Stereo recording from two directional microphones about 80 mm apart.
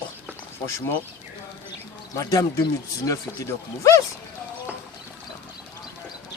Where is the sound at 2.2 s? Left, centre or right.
Left.